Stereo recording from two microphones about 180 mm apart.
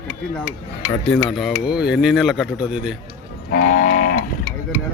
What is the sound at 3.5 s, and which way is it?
Livestock, 55° left (ahead or behind).